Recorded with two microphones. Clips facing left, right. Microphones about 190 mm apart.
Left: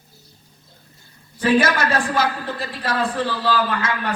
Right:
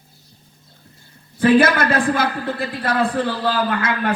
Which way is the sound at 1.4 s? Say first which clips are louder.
Right 4 dB; 55° right (ahead or behind).